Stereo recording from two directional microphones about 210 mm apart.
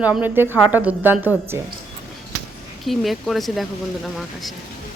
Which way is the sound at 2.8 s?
Centre (ahead or behind).